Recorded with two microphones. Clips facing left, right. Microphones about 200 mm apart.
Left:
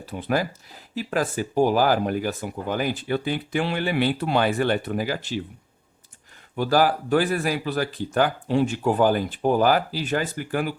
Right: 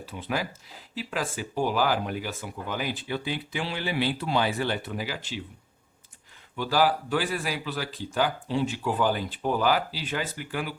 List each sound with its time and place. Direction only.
0.1 s speech: 45° left (ahead or behind)
6.6 s speech: 50° left (ahead or behind)